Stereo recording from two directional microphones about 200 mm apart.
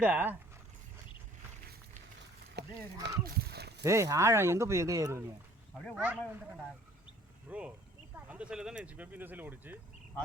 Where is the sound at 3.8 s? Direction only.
15° right (ahead or behind).